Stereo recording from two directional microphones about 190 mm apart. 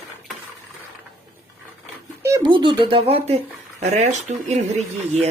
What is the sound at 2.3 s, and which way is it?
Speech, 20° right (ahead or behind).